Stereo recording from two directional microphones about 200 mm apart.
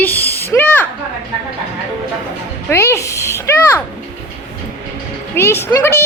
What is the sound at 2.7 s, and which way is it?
A child's voice, 15° left (ahead or behind).